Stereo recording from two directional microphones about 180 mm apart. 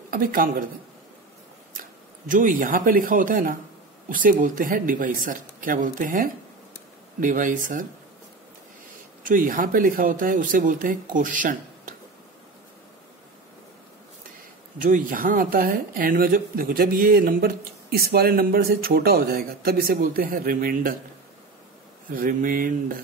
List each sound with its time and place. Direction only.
0.1 s speech: 50° right (ahead or behind)
2.2 s speech: 50° right (ahead or behind)
9.2 s speech: 50° right (ahead or behind)
14.8 s speech: 50° right (ahead or behind)
22.1 s speech: 50° right (ahead or behind)